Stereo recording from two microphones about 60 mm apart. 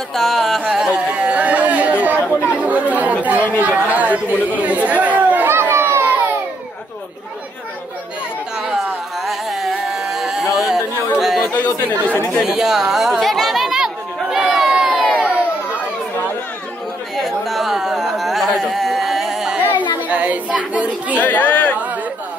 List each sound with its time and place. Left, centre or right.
0.1 s music: centre
0.9 s chatter: centre; by 6.2 s right
8.6 s a sound: centre
11.1 s chatter: centre
11.5 s chatter: left
12.4 s chatter: centre
15.2 s crowd: right
17.2 s a sound: centre
20.1 s a sound: right
21.2 s speech: left